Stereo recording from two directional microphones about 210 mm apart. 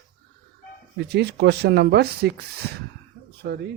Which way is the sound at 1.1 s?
55° right (ahead or behind).